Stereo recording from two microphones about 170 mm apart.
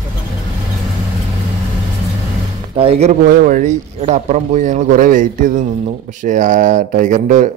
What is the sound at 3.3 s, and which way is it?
Speech, 50° right (ahead or behind).